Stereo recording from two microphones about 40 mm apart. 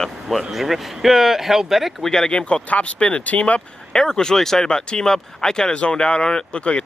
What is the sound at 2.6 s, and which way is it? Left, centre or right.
Speech, left.